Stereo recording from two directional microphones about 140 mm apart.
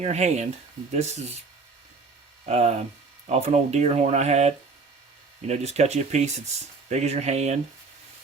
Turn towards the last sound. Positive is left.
turn(degrees=-50)  # may be behind; listen again after turning